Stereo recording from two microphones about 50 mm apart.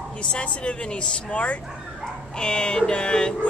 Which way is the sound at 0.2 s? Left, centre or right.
Left.